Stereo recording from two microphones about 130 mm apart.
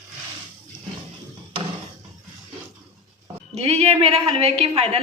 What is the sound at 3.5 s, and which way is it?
Speech, 55° right (ahead or behind).